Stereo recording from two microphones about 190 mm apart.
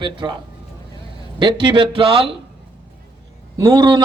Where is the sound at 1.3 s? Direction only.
25° right (ahead or behind).